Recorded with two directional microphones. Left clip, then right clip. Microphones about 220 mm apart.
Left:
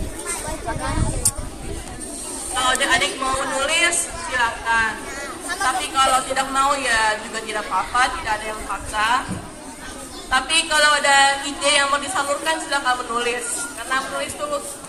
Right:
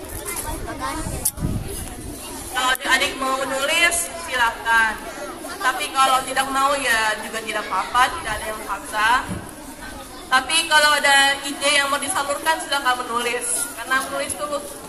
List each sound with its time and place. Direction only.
2.5 s chatter: 15° right (ahead or behind)
3.5 s music: 10° right (ahead or behind)
5.6 s speech: 15° right (ahead or behind)
10.3 s speech: 15° right (ahead or behind)